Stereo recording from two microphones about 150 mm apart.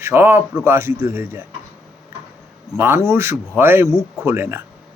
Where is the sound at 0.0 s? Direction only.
15° right (ahead or behind).